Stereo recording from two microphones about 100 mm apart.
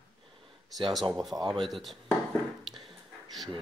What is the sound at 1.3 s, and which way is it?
Speech, 30° right (ahead or behind).